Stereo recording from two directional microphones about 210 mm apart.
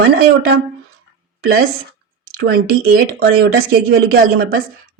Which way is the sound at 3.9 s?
45° right (ahead or behind).